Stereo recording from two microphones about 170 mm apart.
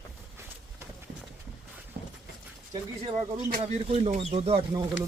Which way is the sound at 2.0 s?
70° right (ahead or behind).